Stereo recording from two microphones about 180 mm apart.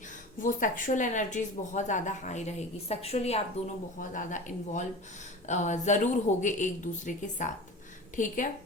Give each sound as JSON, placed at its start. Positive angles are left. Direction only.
{"t": 0.3, "sound": "speech", "side_deg": 45}